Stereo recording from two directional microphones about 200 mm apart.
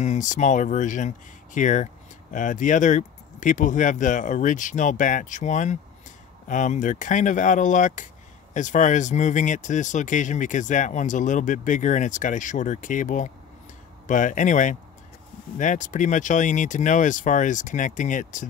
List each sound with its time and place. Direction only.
0.0 s speech: 35° left (ahead or behind)